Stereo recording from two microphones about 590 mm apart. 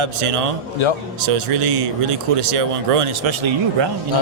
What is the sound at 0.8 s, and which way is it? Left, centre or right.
Speech, left.